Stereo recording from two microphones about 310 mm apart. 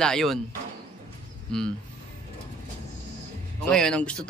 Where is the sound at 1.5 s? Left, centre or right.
Centre.